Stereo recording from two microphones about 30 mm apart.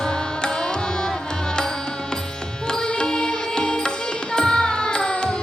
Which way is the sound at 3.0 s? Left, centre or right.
Left.